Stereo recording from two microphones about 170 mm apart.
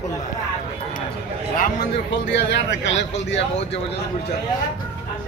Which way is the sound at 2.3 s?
90° left.